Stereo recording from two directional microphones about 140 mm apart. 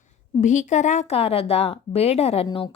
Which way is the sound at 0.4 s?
60° left (ahead or behind).